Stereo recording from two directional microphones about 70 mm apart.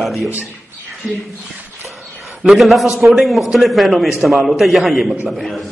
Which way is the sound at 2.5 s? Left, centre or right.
Centre.